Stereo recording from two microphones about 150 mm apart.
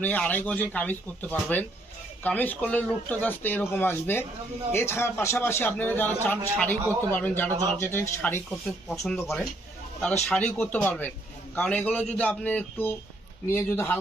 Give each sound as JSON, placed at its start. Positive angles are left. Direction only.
{"t": 0.0, "sound": "speech", "side_deg": 10}